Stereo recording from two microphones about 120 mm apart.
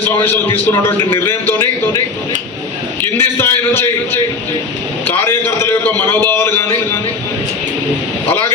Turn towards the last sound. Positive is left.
turn(degrees=20)  # may be behind; listen again after turning